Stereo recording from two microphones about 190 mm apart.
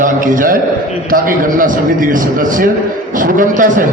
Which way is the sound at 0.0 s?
45° right (ahead or behind).